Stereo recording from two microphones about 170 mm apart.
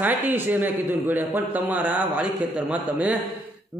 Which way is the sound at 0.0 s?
10° right (ahead or behind).